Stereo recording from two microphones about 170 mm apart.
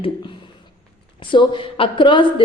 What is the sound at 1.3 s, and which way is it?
A woman's voice, 30° left (ahead or behind).